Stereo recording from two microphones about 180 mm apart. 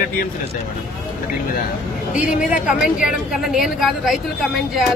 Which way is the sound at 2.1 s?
45° left (ahead or behind).